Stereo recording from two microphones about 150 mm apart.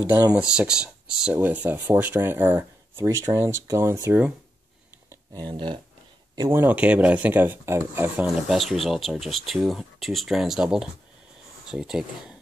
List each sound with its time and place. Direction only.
0.0 s speech: 10° right (ahead or behind)
5.1 s speech: 25° right (ahead or behind)
6.6 s speech: 10° right (ahead or behind)